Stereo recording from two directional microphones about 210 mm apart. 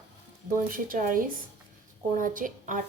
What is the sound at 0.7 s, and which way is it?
A woman's voice, 40° right (ahead or behind).